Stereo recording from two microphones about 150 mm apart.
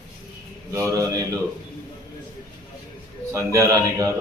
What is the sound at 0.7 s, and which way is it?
Speech, 20° right (ahead or behind).